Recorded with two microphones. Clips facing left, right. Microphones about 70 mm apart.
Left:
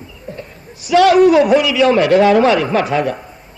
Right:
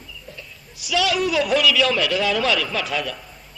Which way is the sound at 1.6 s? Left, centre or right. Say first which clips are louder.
Left 7 dB; left.